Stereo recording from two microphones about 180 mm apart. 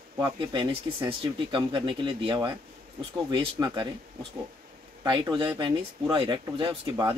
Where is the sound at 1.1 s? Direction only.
30° right (ahead or behind).